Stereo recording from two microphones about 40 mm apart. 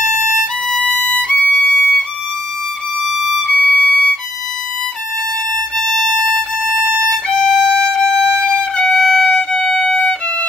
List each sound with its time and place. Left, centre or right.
0.7 s violin: centre
0.9 s violin: left
3.5 s violin: left
5.8 s music: centre
6.8 s violin: right
7.2 s music: centre
9.0 s violin: centre